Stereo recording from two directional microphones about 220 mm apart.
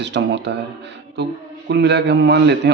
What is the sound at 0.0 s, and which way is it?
Speech, 50° right (ahead or behind).